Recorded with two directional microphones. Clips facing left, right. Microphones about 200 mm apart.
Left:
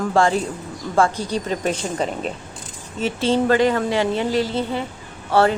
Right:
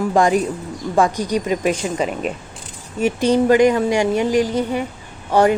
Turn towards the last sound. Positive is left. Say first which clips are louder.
# right 2 dB
turn(degrees=-15)  # may be behind; listen again after turning